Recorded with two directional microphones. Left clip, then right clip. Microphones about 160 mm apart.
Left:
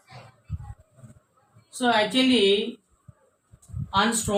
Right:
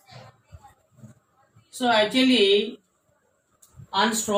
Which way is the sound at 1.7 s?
20° left (ahead or behind).